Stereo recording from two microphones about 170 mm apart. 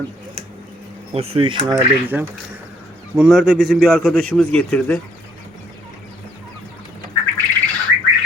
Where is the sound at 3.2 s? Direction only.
Centre (ahead or behind).